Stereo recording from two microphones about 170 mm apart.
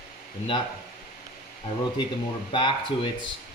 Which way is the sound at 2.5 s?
30° left (ahead or behind).